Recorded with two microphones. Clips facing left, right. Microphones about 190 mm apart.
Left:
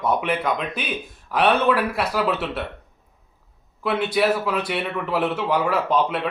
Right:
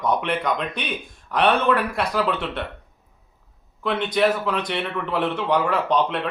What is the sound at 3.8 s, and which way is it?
Speech, 5° left (ahead or behind).